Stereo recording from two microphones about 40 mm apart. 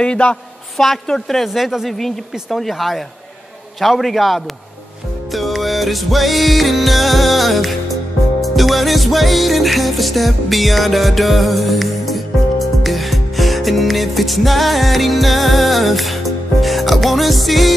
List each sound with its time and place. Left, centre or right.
0.0 s a woman's voice: left
0.7 s a woman's voice: centre
1.4 s a woman's voice: centre
2.0 s a woman's voice: centre
5.3 s music: centre